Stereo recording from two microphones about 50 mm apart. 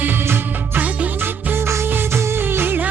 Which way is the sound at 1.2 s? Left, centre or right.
Right.